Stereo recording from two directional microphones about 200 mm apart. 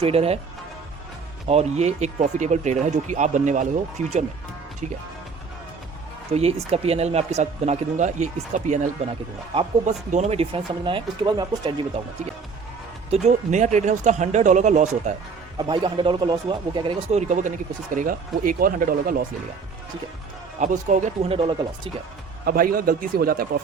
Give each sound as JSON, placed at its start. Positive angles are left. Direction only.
{"t": 0.0, "sound": "speech", "side_deg": -30}
{"t": 1.5, "sound": "speech", "side_deg": -30}
{"t": 6.3, "sound": "speech", "side_deg": -30}
{"t": 15.5, "sound": "speech", "side_deg": -20}
{"t": 20.6, "sound": "speech", "side_deg": -40}
{"t": 22.4, "sound": "speech", "side_deg": -45}